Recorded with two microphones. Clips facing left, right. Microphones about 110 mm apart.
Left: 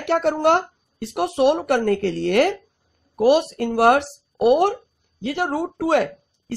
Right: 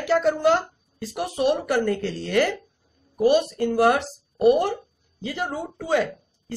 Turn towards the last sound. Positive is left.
turn(degrees=70)  # may be behind; listen again after turning